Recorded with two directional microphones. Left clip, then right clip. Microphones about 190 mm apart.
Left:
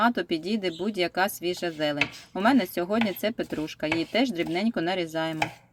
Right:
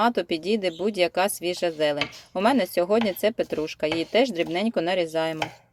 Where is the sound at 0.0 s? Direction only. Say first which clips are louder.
Right 2 dB; 20° right (ahead or behind).